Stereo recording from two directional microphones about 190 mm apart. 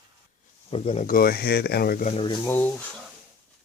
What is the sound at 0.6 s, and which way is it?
Speech, 30° left (ahead or behind).